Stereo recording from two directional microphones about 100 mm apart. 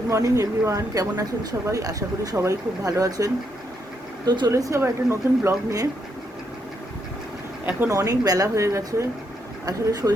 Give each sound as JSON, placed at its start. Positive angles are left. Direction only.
{"t": 0.1, "sound": "speech", "side_deg": -30}
{"t": 4.3, "sound": "speech", "side_deg": -45}
{"t": 4.5, "sound": "speech", "side_deg": -30}
{"t": 7.6, "sound": "speech", "side_deg": -20}
{"t": 7.9, "sound": "speech", "side_deg": -35}